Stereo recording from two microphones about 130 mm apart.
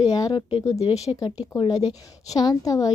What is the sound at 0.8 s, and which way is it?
Speech, 55° left (ahead or behind).